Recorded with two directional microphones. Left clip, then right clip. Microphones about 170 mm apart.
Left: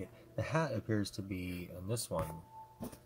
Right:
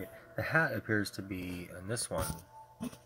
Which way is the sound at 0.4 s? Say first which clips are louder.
Right 5 dB; 10° left (ahead or behind).